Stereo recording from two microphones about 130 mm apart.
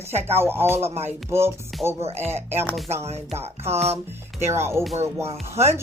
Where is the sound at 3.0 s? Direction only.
55° right (ahead or behind).